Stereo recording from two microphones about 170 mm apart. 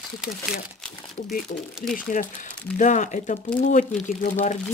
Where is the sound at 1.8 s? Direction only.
55° left (ahead or behind).